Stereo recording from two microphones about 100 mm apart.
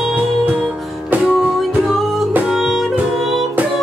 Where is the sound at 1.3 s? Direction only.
Centre (ahead or behind).